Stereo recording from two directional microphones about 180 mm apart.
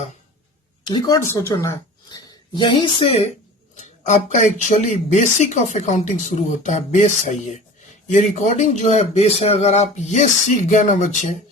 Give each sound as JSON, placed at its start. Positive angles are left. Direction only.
{"t": 0.9, "sound": "a woman's voice", "side_deg": 20}
{"t": 3.8, "sound": "speech", "side_deg": 40}